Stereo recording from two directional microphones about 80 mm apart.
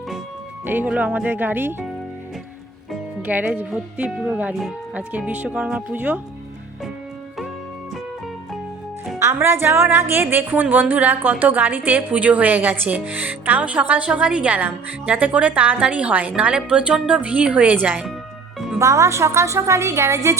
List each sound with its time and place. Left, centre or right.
0.6 s a woman's voice: right
3.2 s a woman's voice: right
9.1 s a woman's voice: right; by 17.7 s centre
18.8 s a woman's voice: right